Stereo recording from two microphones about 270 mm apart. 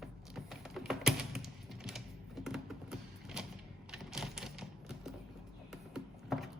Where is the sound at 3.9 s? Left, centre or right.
Centre.